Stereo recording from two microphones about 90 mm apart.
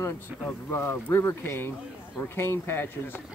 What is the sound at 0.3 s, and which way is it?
Speech, 15° right (ahead or behind).